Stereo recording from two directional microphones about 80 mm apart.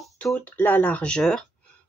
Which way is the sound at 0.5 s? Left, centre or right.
Left.